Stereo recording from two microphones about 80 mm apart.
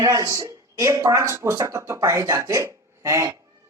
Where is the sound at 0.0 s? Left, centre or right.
Right.